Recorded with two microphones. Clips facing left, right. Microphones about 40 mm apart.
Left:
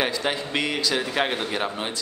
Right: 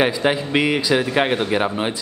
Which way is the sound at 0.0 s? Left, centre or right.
Centre.